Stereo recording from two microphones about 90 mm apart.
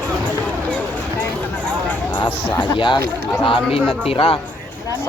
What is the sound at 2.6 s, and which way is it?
Speech, 60° left (ahead or behind).